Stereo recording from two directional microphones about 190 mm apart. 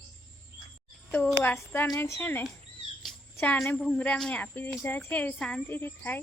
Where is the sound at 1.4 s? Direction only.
10° left (ahead or behind).